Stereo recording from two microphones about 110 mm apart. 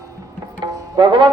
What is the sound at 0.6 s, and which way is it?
Music, 45° right (ahead or behind).